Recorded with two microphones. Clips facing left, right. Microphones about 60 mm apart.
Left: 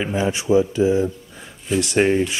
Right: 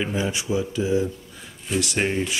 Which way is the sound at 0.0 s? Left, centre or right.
Left.